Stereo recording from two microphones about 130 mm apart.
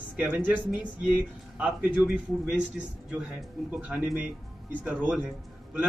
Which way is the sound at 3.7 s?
10° right (ahead or behind).